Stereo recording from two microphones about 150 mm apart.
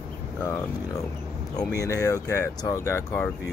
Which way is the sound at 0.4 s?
15° left (ahead or behind).